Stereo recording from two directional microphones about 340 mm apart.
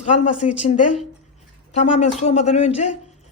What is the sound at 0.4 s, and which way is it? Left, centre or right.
Speech, centre.